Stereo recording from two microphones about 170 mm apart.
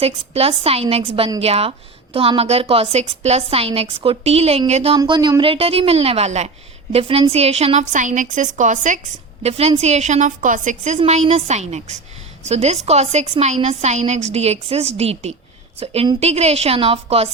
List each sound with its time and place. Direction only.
0.0 s a woman's voice: 35° right (ahead or behind)
4.9 s a woman's voice: 25° right (ahead or behind)